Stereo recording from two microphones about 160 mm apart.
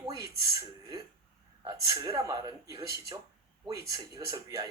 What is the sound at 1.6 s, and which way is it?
A man's voice, 20° right (ahead or behind).